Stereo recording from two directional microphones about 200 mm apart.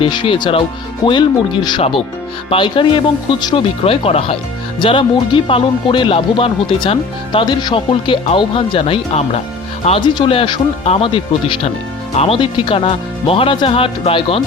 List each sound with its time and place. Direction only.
0.0 s speech: 25° left (ahead or behind)